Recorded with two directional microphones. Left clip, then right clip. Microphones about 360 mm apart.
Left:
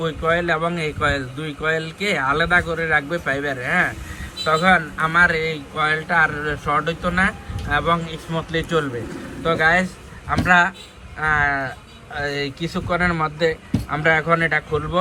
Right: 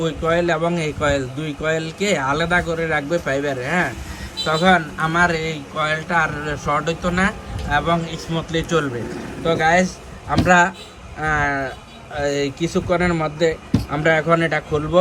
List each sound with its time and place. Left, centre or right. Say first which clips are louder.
0.0 s speech: right 1 dB; centre